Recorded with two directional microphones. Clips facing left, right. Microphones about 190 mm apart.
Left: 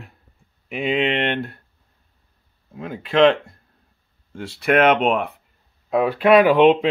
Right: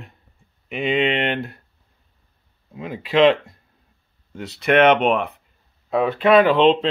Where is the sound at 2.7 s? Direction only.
Centre (ahead or behind).